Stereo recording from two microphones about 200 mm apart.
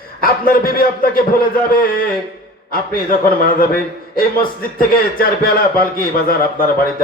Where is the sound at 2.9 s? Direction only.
45° left (ahead or behind).